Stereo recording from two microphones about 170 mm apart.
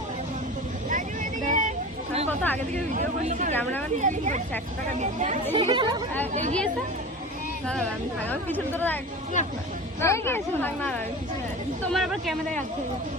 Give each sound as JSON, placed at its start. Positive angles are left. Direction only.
{"t": 0.9, "sound": "vehicle", "side_deg": -50}
{"t": 2.4, "sound": "speech", "side_deg": 10}
{"t": 2.9, "sound": "speech", "side_deg": -50}
{"t": 3.5, "sound": "speech", "side_deg": 10}
{"t": 3.9, "sound": "speech", "side_deg": -45}
{"t": 5.5, "sound": "speech", "side_deg": -25}
{"t": 8.3, "sound": "speech", "side_deg": 10}
{"t": 10.0, "sound": "speech", "side_deg": 15}
{"t": 11.9, "sound": "speech", "side_deg": 0}